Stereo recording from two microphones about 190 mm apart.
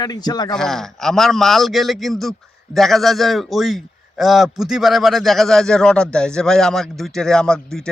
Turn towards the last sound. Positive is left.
turn(degrees=5)  # may be behind; listen again after turning